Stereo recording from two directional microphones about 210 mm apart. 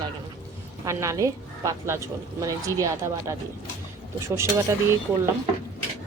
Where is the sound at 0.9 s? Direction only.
15° right (ahead or behind).